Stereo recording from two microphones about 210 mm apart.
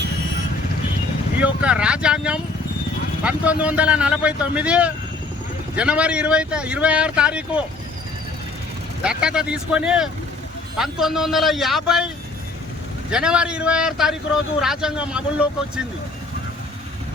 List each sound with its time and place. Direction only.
1.6 s speech: 5° right (ahead or behind)
9.0 s speech: 5° right (ahead or behind)
13.1 s speech: 5° right (ahead or behind)